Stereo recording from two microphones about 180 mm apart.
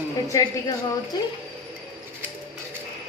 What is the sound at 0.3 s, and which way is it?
Child singing, 20° left (ahead or behind).